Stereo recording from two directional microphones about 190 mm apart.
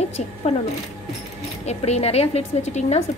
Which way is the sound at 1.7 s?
35° left (ahead or behind).